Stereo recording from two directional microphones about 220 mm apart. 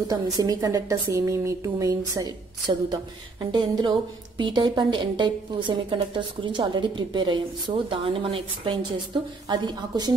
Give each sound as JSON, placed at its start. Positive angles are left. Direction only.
{"t": 0.1, "sound": "a woman's voice", "side_deg": -15}